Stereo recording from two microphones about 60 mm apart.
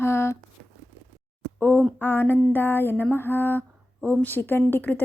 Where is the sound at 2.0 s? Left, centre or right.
Left.